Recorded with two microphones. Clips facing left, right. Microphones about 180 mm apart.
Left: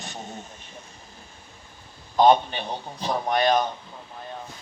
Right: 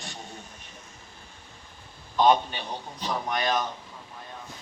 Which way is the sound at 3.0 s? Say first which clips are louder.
Left 6 dB; 30° left (ahead or behind).